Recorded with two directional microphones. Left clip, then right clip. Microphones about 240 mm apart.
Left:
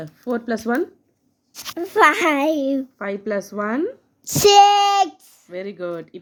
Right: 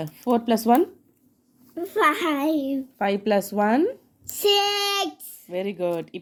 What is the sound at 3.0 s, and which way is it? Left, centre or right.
Speech, centre.